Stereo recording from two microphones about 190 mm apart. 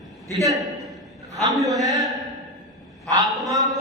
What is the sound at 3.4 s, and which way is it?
Speech, centre (ahead or behind).